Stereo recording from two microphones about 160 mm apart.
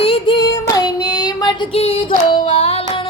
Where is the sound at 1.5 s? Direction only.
40° left (ahead or behind).